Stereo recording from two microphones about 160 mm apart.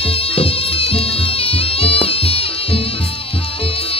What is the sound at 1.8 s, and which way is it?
Music, 35° left (ahead or behind).